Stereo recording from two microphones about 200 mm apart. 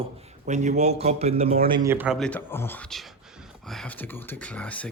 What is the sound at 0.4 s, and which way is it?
Speech, 35° right (ahead or behind).